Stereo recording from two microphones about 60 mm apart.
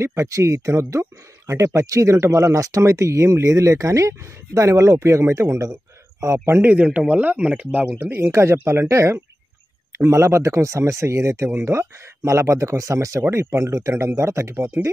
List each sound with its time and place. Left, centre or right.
0.0 s speech: right
6.4 s a man's voice: right
6.8 s speech: right
7.9 s speech: right
8.2 s speech: right
12.2 s speech: right
13.2 s speech: right